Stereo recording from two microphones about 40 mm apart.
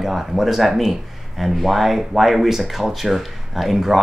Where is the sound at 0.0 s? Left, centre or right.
Centre.